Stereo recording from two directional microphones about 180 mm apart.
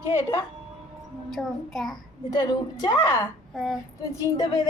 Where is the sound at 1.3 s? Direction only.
Centre (ahead or behind).